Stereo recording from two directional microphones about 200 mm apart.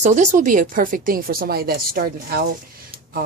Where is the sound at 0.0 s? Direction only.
35° right (ahead or behind).